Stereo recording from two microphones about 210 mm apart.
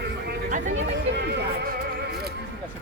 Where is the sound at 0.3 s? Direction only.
40° right (ahead or behind).